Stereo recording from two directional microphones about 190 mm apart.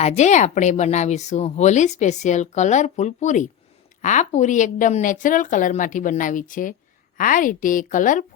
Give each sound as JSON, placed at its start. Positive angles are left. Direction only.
{"t": 0.0, "sound": "a woman's voice", "side_deg": 40}